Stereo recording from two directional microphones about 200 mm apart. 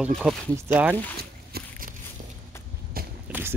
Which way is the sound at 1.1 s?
50° right (ahead or behind).